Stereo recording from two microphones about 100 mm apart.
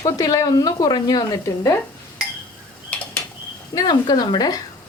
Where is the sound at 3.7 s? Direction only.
45° left (ahead or behind).